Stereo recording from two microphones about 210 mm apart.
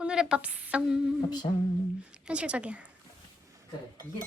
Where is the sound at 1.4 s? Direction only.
20° left (ahead or behind).